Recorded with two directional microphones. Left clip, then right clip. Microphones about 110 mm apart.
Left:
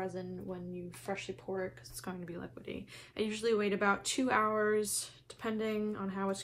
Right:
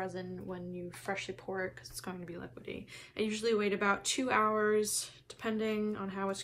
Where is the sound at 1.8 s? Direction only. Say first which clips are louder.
Right 1 dB; 5° right (ahead or behind).